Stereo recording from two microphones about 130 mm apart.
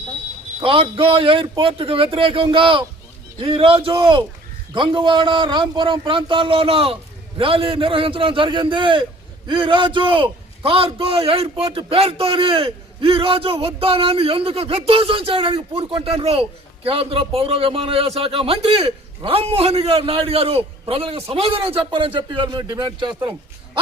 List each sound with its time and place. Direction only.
0.6 s a man's voice: 45° right (ahead or behind)